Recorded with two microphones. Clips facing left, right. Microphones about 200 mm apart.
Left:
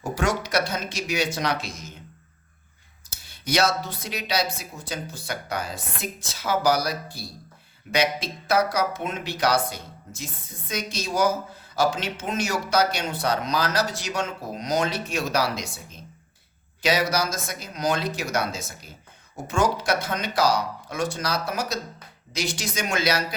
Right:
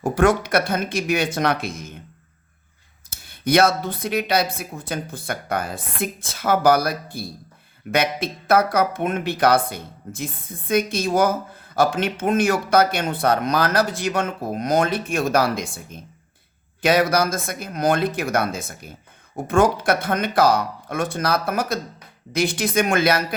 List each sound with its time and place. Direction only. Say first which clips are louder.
0.0 s speech: right 8 dB; 55° right (ahead or behind)
3.1 s speech: right 8 dB; 55° right (ahead or behind)